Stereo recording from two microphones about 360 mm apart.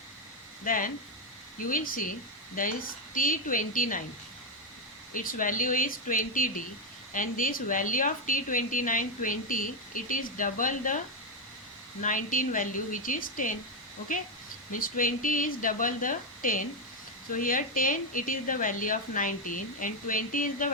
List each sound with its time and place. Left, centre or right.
0.6 s a woman's voice: left
5.1 s a woman's voice: left
14.7 s a woman's voice: left